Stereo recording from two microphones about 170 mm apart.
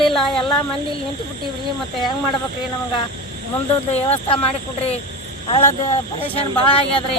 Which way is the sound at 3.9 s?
35° left (ahead or behind).